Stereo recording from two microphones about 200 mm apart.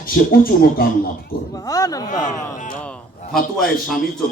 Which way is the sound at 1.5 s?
15° left (ahead or behind).